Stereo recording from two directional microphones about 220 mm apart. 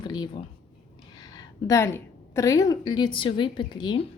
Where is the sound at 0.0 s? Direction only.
20° left (ahead or behind).